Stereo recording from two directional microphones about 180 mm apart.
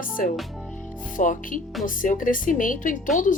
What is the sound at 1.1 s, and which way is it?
A woman's voice, 45° left (ahead or behind).